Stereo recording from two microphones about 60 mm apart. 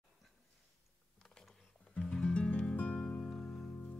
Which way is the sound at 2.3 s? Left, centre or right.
Centre.